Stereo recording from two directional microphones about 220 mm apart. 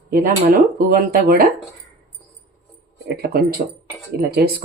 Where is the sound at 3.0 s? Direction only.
45° right (ahead or behind).